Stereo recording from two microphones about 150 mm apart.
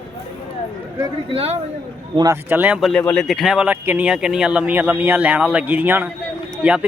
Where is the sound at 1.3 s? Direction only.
40° right (ahead or behind).